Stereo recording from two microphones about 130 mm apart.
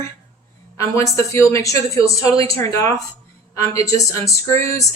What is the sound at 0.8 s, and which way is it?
A woman's voice, 25° left (ahead or behind).